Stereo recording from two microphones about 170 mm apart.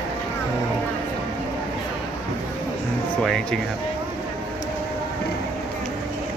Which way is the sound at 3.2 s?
5° left (ahead or behind).